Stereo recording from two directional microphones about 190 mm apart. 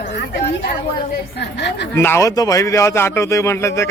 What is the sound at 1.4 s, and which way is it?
Speech, 65° left (ahead or behind).